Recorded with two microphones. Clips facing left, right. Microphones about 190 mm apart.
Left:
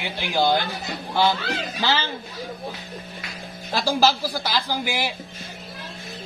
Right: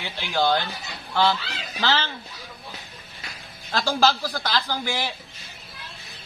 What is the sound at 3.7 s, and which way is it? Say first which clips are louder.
Speech: left 1 dB; 10° left (ahead or behind).